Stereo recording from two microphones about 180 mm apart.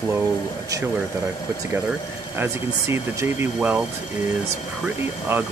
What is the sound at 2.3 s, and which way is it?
Speech, 15° right (ahead or behind).